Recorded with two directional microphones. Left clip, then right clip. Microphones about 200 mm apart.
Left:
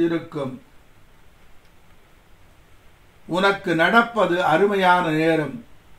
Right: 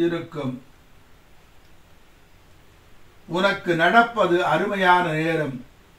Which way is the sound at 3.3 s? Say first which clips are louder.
Left 2 dB; 55° left (ahead or behind).